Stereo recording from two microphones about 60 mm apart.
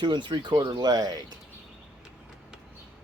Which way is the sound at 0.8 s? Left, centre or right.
Right.